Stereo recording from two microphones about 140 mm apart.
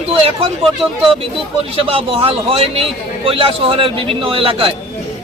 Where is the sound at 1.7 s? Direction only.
40° right (ahead or behind).